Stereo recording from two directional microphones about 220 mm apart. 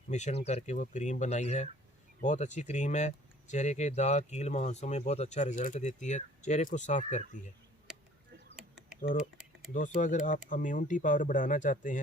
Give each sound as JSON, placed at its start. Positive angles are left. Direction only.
{"t": 0.1, "sound": "speech", "side_deg": 30}
{"t": 8.5, "sound": "typing", "side_deg": 0}
{"t": 9.0, "sound": "speech", "side_deg": 35}
{"t": 9.4, "sound": "typing", "side_deg": 0}
{"t": 9.7, "sound": "speech", "side_deg": 35}